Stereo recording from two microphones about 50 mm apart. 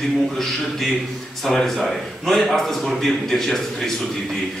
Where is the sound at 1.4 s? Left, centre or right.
Centre.